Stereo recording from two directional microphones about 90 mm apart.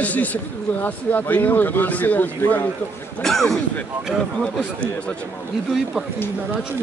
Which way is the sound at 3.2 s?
5° left (ahead or behind).